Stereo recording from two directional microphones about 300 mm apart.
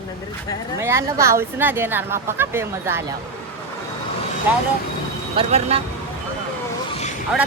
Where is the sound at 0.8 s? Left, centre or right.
Centre.